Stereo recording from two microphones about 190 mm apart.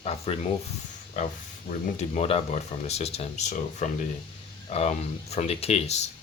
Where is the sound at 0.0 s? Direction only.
35° left (ahead or behind).